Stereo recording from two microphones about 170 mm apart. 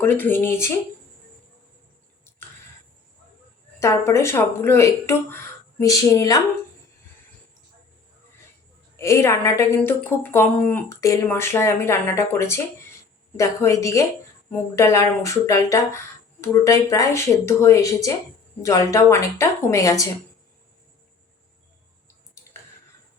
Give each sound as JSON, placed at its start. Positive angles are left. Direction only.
{"t": 0.0, "sound": "a woman's voice", "side_deg": 10}
{"t": 3.8, "sound": "a woman's voice", "side_deg": 15}
{"t": 9.0, "sound": "a woman's voice", "side_deg": 15}